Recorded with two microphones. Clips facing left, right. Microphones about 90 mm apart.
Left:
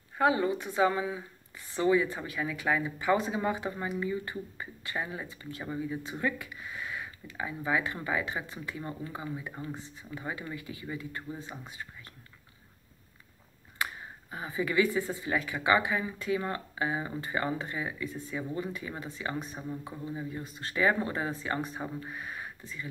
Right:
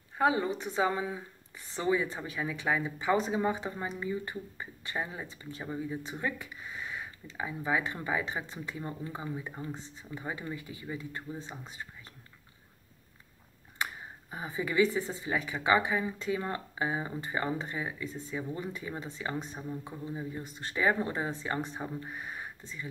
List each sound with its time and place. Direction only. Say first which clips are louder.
0.2 s speech: left 1 dB; 25° right (ahead or behind)
14.3 s speech: left 2 dB; 20° right (ahead or behind)
21.8 s speech: left 1 dB; 15° left (ahead or behind)
22.1 s a sound: left 1 dB; 20° right (ahead or behind)